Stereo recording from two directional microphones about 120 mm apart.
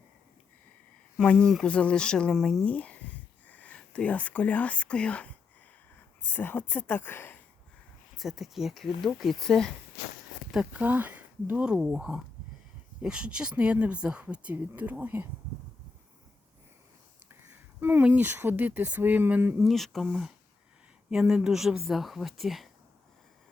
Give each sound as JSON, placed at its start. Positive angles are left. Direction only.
{"t": 1.2, "sound": "speech", "side_deg": 10}
{"t": 8.1, "sound": "speech", "side_deg": 0}
{"t": 10.5, "sound": "speech", "side_deg": -10}
{"t": 17.7, "sound": "speech", "side_deg": -15}
{"t": 19.5, "sound": "speech", "side_deg": 0}